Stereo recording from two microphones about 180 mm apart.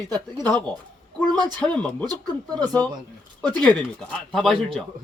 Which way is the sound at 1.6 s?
5° left (ahead or behind).